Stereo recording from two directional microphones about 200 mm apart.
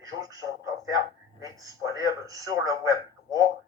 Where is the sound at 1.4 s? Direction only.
15° right (ahead or behind).